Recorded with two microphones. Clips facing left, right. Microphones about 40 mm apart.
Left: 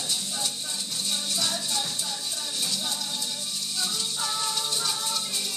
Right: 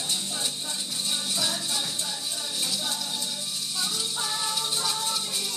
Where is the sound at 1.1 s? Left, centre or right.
Centre.